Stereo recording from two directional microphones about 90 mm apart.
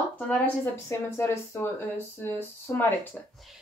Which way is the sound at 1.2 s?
25° left (ahead or behind).